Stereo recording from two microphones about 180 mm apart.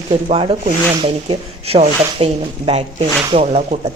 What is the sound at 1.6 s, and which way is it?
Speech, 35° right (ahead or behind).